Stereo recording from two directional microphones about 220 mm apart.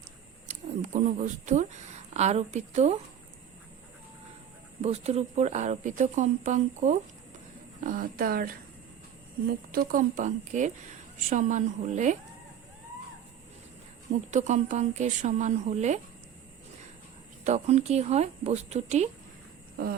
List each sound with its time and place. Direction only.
0.4 s speech: 35° right (ahead or behind)
4.8 s a woman's voice: 30° right (ahead or behind)
9.7 s a woman's voice: 35° right (ahead or behind)
14.1 s a woman's voice: 35° right (ahead or behind)
17.4 s speech: 30° right (ahead or behind)